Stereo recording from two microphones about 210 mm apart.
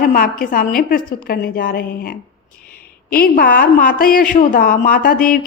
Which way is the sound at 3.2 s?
45° left (ahead or behind).